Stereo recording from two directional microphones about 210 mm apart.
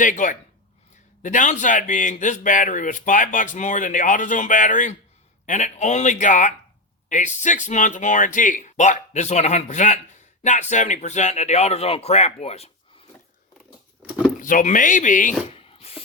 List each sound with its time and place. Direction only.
0.0 s speech: 40° left (ahead or behind)
14.4 s speech: 40° left (ahead or behind)